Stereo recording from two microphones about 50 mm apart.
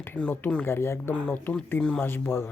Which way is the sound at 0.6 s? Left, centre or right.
Left.